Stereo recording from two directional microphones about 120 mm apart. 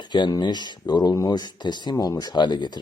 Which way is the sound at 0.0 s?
35° left (ahead or behind).